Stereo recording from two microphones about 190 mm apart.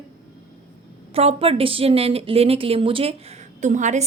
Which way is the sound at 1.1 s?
30° right (ahead or behind).